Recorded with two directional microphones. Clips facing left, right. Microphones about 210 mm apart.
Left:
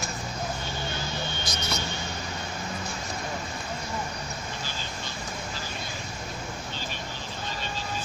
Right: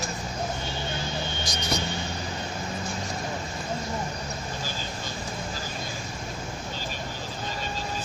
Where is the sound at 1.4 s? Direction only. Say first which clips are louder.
Right 3 dB; 15° right (ahead or behind).